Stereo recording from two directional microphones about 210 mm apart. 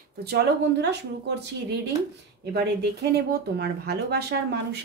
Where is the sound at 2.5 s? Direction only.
50° right (ahead or behind).